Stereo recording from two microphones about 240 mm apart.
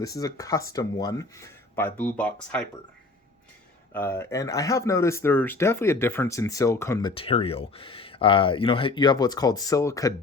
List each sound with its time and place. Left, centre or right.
0.0 s speech: centre
3.9 s speech: centre
7.1 s speech: left